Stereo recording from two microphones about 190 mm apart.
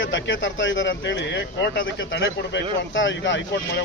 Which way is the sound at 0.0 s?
75° left (ahead or behind).